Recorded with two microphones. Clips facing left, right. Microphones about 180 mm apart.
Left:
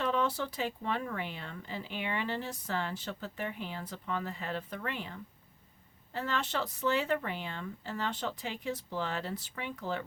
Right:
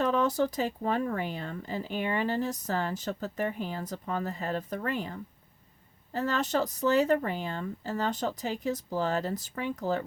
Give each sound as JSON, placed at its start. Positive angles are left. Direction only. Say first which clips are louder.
{"t": 0.0, "sound": "speech", "louder": "right 5 dB", "side_deg": -40}